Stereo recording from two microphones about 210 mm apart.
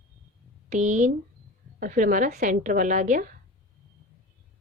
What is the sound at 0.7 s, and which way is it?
A woman's voice, 35° right (ahead or behind).